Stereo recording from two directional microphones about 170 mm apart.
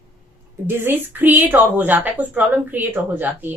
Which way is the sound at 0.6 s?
10° right (ahead or behind).